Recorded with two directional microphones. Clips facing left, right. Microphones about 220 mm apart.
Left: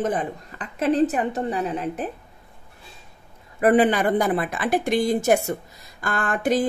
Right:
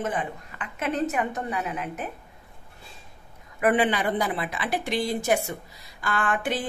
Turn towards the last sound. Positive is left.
turn(degrees=40)  # may be behind; listen again after turning